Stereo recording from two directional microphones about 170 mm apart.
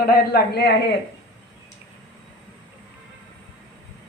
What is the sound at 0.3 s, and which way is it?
Speech, 75° left (ahead or behind).